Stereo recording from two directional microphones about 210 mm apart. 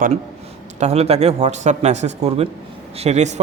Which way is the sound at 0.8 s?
30° right (ahead or behind).